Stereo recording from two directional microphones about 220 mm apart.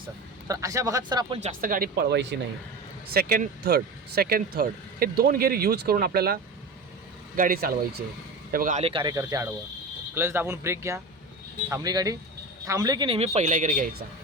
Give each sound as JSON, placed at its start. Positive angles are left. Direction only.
{"t": 0.4, "sound": "speech", "side_deg": -15}
{"t": 1.4, "sound": "a man's voice", "side_deg": -40}